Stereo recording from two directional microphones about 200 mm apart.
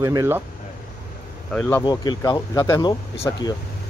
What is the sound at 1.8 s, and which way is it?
Speech, 20° left (ahead or behind).